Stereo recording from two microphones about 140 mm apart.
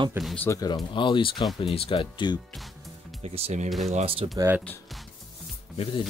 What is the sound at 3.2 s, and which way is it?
Speech, 50° right (ahead or behind).